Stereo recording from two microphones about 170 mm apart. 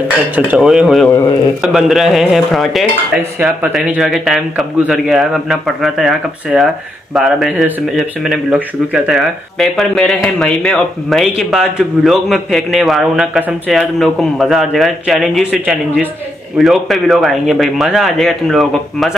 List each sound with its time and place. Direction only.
0.4 s speech: 5° right (ahead or behind)